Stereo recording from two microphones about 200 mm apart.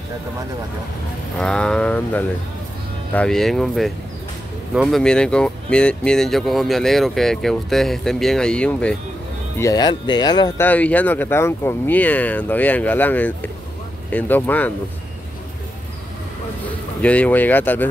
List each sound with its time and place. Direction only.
1.4 s speech: 5° left (ahead or behind)
9.6 s speech: 20° left (ahead or behind)
10.6 s speech: 5° left (ahead or behind)
17.0 s speech: 5° left (ahead or behind)